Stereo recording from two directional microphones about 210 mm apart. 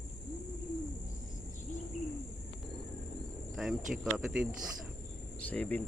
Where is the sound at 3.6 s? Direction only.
Centre (ahead or behind).